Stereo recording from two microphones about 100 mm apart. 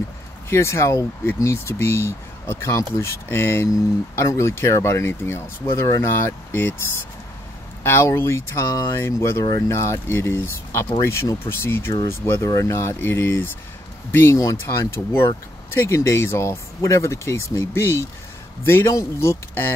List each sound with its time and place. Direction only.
0.5 s speech: 25° left (ahead or behind)
7.8 s speech: 25° left (ahead or behind)